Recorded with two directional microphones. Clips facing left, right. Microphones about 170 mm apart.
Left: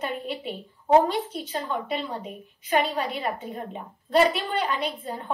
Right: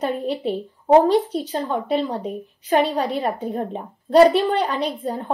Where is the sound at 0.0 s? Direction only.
35° right (ahead or behind).